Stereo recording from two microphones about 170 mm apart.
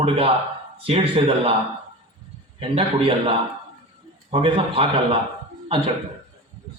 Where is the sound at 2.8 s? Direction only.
30° right (ahead or behind).